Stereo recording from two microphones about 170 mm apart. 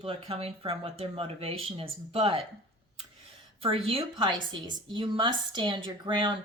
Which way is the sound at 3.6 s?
35° right (ahead or behind).